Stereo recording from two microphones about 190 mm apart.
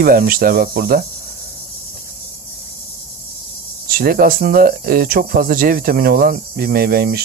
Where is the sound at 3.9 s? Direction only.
50° right (ahead or behind).